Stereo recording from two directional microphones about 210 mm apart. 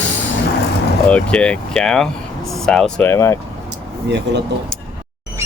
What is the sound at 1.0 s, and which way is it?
Speech, 5° left (ahead or behind).